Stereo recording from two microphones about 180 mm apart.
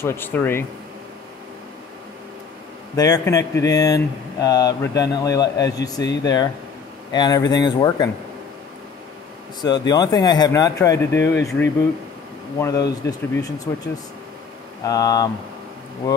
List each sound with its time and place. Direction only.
0.0 s speech: 10° left (ahead or behind)
3.0 s speech: 20° left (ahead or behind)
9.6 s speech: 20° left (ahead or behind)
14.8 s speech: 20° left (ahead or behind)